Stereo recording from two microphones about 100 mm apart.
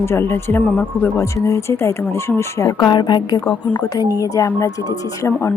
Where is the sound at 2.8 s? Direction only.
50° left (ahead or behind).